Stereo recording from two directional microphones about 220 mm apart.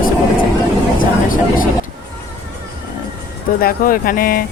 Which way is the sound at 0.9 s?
40° left (ahead or behind).